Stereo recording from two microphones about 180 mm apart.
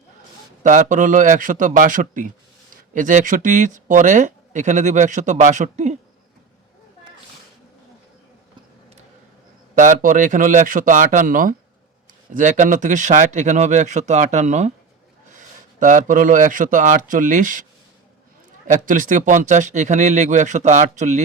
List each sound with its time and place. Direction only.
0.6 s speech: 45° right (ahead or behind)
9.7 s speech: 45° right (ahead or behind)
18.7 s speech: 45° right (ahead or behind)